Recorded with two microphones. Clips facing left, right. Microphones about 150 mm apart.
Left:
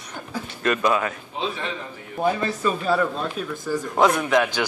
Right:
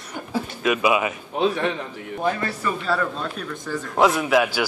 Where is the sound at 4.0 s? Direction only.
5° right (ahead or behind).